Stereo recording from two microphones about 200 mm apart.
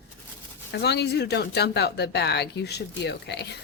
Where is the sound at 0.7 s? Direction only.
55° left (ahead or behind).